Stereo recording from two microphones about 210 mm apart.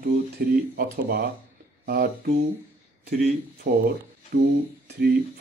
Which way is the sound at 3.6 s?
45° right (ahead or behind).